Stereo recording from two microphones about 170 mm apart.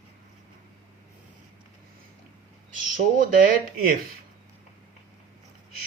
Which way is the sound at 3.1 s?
50° right (ahead or behind).